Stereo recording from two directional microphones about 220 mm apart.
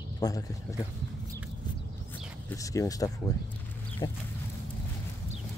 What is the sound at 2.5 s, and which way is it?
A man's voice, 15° left (ahead or behind).